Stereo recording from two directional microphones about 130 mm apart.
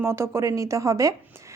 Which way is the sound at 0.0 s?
20° right (ahead or behind).